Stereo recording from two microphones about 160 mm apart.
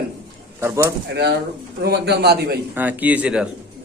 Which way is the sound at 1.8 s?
90° right.